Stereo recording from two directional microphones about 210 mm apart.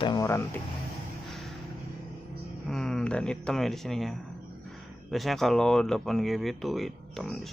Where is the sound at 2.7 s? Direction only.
5° left (ahead or behind).